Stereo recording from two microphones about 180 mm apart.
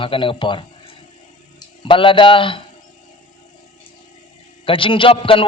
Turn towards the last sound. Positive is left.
turn(degrees=30)  # may be behind; listen again after turning